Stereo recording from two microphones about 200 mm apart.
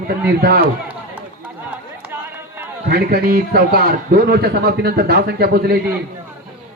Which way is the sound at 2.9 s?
50° right (ahead or behind).